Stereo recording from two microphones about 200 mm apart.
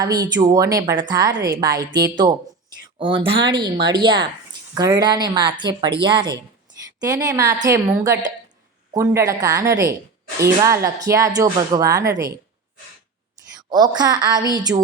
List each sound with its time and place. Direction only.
0.0 s a woman's voice: 20° right (ahead or behind)
13.6 s a woman's voice: 20° right (ahead or behind)